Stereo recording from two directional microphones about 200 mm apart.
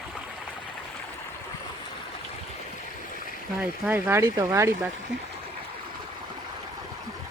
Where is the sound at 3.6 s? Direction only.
5° right (ahead or behind).